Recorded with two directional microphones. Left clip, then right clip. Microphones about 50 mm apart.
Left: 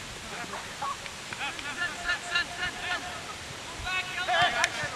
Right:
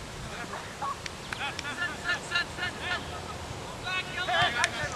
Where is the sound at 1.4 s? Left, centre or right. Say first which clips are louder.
Left 1 dB; centre.